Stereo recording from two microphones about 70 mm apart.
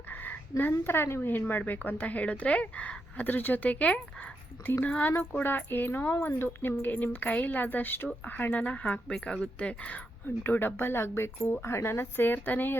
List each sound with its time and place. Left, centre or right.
0.1 s a sound: left
0.9 s a woman's voice: left; by 10.0 s centre
10.2 s speech: left